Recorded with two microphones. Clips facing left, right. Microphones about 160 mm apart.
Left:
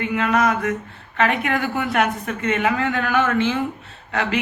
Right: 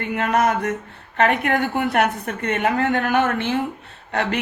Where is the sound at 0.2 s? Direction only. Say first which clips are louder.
Right 1 dB; 55° right (ahead or behind).